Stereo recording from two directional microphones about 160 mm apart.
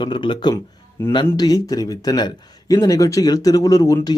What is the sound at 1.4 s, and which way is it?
Speech, 25° left (ahead or behind).